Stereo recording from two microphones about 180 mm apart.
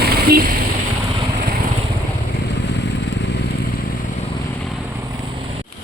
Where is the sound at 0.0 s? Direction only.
55° right (ahead or behind).